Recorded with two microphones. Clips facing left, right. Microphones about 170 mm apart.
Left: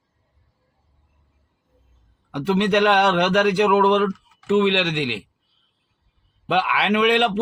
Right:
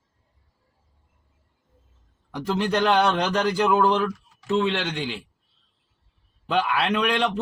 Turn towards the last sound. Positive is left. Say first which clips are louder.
# left 5 dB
turn(degrees=65)  # may be behind; listen again after turning